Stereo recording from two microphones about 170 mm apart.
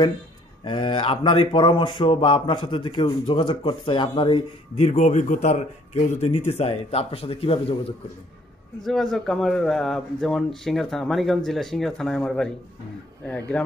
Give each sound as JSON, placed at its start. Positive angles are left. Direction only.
{"t": 0.7, "sound": "speech", "side_deg": 30}
{"t": 4.8, "sound": "speech", "side_deg": 45}
{"t": 8.8, "sound": "a man's voice", "side_deg": 0}